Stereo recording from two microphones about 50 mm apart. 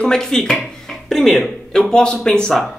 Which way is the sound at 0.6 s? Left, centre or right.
Centre.